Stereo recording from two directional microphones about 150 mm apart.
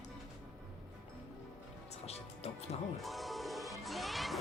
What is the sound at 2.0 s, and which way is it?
Music, 45° left (ahead or behind).